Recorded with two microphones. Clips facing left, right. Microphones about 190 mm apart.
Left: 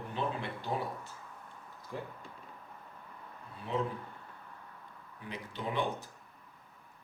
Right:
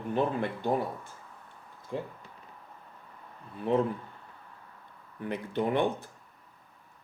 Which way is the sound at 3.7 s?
60° right (ahead or behind).